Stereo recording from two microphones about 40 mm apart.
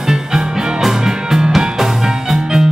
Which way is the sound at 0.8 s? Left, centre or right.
Centre.